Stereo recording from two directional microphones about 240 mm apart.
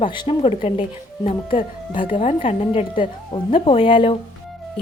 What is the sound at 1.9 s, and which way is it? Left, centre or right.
A woman's voice, left.